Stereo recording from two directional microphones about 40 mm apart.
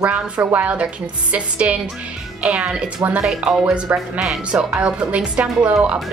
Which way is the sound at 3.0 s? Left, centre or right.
Right.